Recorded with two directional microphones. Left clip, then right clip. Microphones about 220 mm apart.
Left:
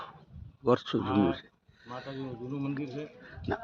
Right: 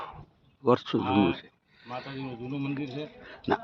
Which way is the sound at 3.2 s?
20° right (ahead or behind).